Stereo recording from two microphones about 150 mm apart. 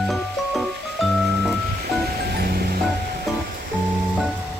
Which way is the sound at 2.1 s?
90° right.